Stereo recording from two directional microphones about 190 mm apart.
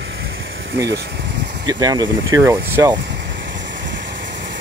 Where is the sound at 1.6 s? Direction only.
20° right (ahead or behind).